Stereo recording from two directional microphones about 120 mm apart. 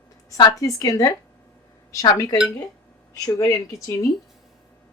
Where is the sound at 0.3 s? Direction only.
30° left (ahead or behind).